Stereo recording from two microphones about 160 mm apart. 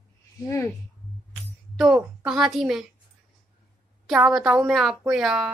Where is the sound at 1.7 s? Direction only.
5° right (ahead or behind).